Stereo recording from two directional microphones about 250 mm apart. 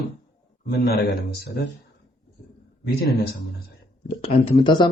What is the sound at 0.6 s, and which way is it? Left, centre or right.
Speech, left.